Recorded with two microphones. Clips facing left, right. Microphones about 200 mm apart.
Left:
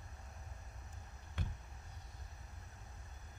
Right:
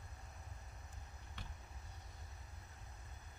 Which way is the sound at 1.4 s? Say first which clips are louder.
Left 10 dB; 50° left (ahead or behind).